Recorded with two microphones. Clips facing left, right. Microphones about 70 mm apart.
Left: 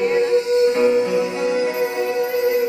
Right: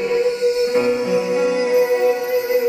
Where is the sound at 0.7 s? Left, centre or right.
Centre.